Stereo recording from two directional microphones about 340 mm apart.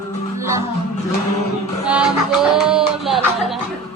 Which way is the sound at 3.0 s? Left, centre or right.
Centre.